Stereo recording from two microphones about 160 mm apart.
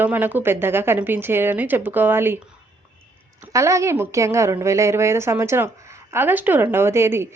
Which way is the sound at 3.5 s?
20° right (ahead or behind).